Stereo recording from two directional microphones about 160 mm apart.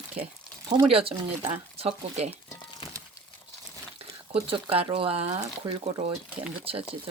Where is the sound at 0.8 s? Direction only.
35° right (ahead or behind).